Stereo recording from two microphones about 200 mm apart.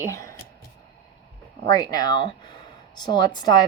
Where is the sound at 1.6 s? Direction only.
20° left (ahead or behind).